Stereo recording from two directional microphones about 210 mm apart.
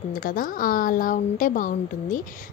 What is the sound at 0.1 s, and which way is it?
A woman's voice, 40° left (ahead or behind).